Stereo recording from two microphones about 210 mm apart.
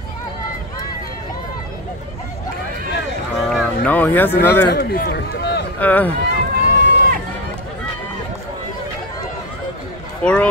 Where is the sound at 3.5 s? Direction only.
5° left (ahead or behind).